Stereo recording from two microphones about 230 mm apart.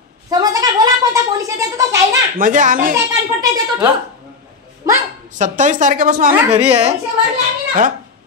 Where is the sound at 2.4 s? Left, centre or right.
Right.